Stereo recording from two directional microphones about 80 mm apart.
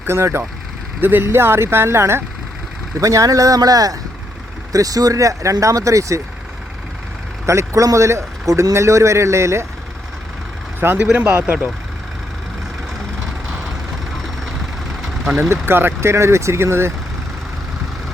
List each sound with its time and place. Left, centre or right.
0.0 s speech: right
3.0 s speech: right
7.4 s speech: right
10.9 s speech: centre
15.6 s speech: right